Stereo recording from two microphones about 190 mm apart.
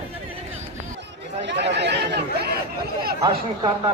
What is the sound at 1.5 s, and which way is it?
Chatter, 65° right (ahead or behind).